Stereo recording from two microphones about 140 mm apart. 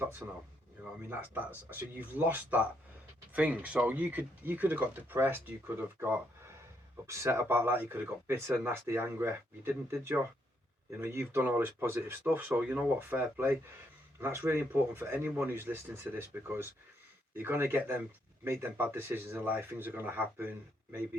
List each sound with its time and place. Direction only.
0.2 s speech: 5° right (ahead or behind)